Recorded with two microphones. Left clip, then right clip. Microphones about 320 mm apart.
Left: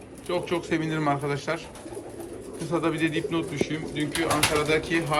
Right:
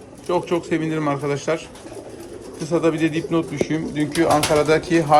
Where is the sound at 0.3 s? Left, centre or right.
Centre.